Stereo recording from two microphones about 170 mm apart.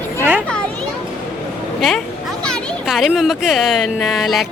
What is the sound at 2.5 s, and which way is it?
Speech, centre (ahead or behind).